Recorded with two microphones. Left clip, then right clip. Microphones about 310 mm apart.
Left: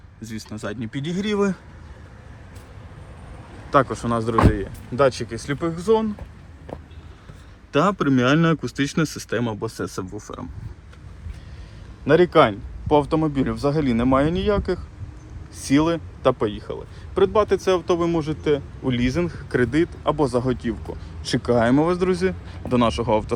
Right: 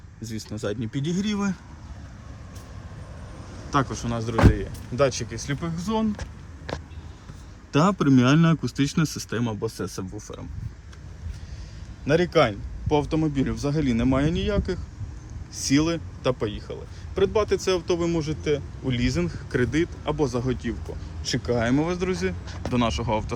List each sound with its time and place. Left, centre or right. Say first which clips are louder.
0.2 s speech: right 1 dB; centre
0.8 s speech: left 1 dB; left
1.0 s speech: left 7 dB; centre
3.7 s speech: left 7 dB; centre
7.7 s speech: left 2 dB; centre
9.7 s speech: left 4 dB; centre
12.0 s speech: left 5 dB; centre